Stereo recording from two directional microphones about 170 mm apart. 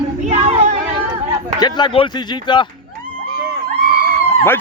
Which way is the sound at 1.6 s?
25° left (ahead or behind).